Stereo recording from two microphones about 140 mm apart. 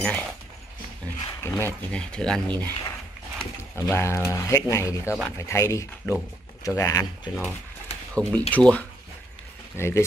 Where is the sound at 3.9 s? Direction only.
20° left (ahead or behind).